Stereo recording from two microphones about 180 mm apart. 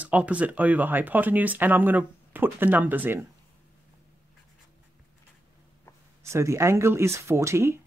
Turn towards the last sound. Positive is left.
turn(degrees=-15)  # may be behind; listen again after turning